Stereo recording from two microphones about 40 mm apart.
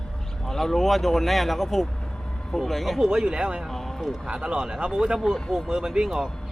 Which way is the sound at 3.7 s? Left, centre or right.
Centre.